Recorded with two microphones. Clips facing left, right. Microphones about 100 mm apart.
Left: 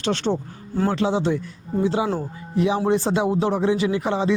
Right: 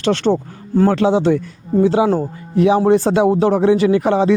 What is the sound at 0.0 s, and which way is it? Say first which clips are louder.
Speech: right 7 dB; 70° right (ahead or behind).